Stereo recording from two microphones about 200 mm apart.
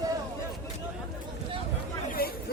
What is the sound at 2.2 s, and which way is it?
Hubbub, 50° left (ahead or behind).